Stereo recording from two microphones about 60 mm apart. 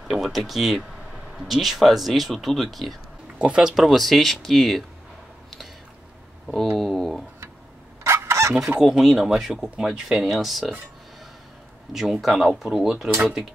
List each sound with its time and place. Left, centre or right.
0.1 s speech: centre
3.3 s speech: centre
3.6 s speech: centre
6.4 s speech: centre
8.0 s fowl: right
8.8 s speech: centre
11.9 s speech: centre